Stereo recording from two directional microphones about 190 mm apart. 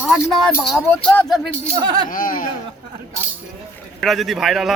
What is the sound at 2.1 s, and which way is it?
Speech, 45° left (ahead or behind).